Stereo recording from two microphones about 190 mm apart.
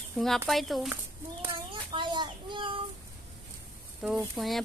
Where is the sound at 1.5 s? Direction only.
25° right (ahead or behind).